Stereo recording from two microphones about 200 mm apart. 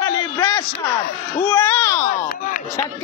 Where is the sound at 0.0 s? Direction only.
15° left (ahead or behind).